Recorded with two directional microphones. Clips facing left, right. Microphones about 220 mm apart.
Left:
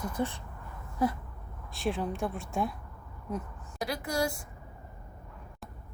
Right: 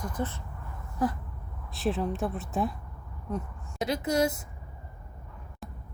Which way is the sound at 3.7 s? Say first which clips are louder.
Right 5 dB; 20° right (ahead or behind).